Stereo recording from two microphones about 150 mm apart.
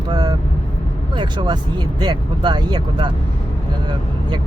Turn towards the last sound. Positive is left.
turn(degrees=-30)  # may be behind; listen again after turning